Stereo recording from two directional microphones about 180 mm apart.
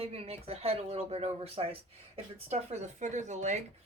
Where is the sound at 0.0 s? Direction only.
35° right (ahead or behind).